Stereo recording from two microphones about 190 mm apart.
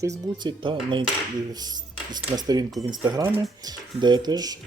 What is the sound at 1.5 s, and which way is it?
Dishes, 20° right (ahead or behind).